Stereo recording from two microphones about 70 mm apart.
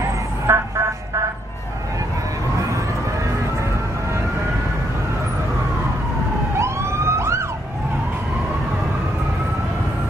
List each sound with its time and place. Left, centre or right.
0.0 s vehicle: right
6.6 s emergency vehicle: right